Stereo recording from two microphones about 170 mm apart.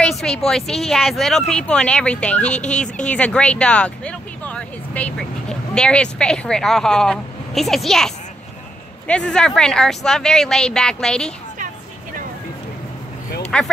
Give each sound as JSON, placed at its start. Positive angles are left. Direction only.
{"t": 0.0, "sound": "speech", "side_deg": 5}
{"t": 2.5, "sound": "speech", "side_deg": 45}
{"t": 3.1, "sound": "speech", "side_deg": 5}
{"t": 13.5, "sound": "speech", "side_deg": 5}